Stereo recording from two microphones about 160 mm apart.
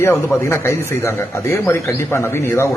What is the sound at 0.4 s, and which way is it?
Speech, 15° left (ahead or behind).